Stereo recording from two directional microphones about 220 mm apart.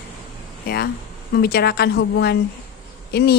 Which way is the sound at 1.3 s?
45° left (ahead or behind).